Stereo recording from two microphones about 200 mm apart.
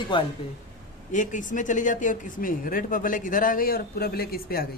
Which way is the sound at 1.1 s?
40° left (ahead or behind).